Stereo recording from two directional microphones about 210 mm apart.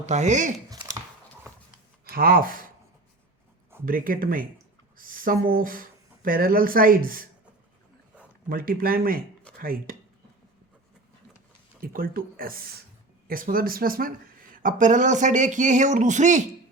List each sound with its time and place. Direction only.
0.0 s speech: 35° right (ahead or behind)
0.7 s a sound: 15° right (ahead or behind)
2.0 s speech: 45° right (ahead or behind)
3.8 s speech: 40° right (ahead or behind)
8.4 s speech: 45° right (ahead or behind)
11.8 s speech: 45° right (ahead or behind)